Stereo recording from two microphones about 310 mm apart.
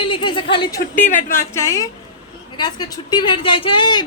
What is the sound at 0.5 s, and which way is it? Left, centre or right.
Speech, centre.